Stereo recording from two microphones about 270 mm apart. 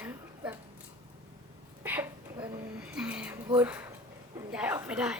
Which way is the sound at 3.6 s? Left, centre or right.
Centre.